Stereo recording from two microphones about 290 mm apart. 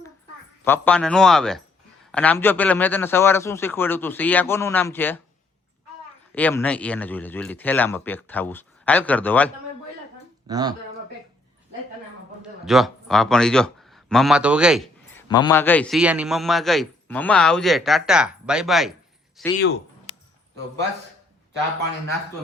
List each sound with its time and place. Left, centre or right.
0.6 s a man's voice: centre
6.3 s a man's voice: centre
10.4 s speech: centre
12.4 s a man's voice: centre
15.3 s a man's voice: centre
19.5 s speech: left